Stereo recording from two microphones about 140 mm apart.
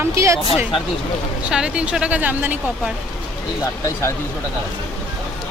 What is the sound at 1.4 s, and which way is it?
Speech, 5° right (ahead or behind).